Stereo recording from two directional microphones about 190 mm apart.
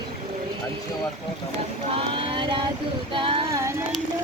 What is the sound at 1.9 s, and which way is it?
Vehicle, 25° right (ahead or behind).